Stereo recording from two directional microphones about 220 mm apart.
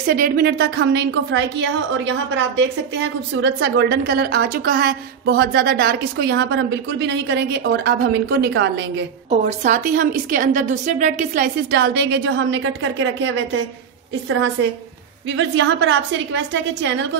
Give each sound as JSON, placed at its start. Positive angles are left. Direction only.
{"t": 0.1, "sound": "a woman's voice", "side_deg": -45}
{"t": 9.3, "sound": "a woman's voice", "side_deg": -35}
{"t": 15.2, "sound": "a woman's voice", "side_deg": -55}